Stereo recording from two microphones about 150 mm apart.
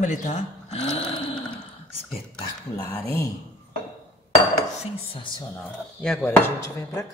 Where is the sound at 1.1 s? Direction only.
30° left (ahead or behind).